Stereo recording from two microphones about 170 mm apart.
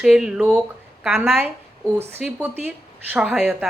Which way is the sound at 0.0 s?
5° right (ahead or behind).